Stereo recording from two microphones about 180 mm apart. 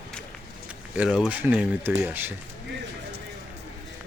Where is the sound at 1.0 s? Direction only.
5° right (ahead or behind).